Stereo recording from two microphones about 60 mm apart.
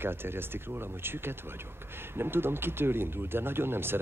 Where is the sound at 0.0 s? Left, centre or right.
Right.